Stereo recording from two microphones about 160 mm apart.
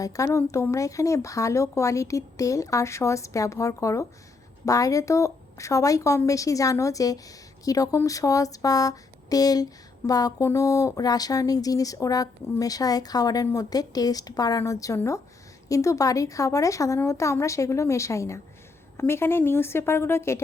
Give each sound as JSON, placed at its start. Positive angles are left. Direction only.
{"t": 0.0, "sound": "a woman's voice", "side_deg": 20}